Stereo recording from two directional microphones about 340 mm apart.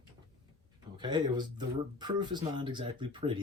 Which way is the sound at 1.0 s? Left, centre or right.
Centre.